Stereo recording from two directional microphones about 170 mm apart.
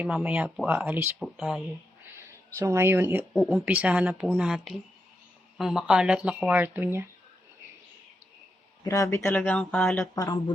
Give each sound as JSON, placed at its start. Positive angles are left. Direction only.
{"t": 0.0, "sound": "speech", "side_deg": -5}
{"t": 2.1, "sound": "speech", "side_deg": -15}
{"t": 8.8, "sound": "speech", "side_deg": 20}
{"t": 10.0, "sound": "speech", "side_deg": 20}